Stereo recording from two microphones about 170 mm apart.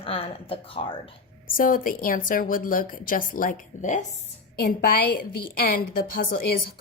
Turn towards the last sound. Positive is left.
turn(degrees=60)  # may be behind; listen again after turning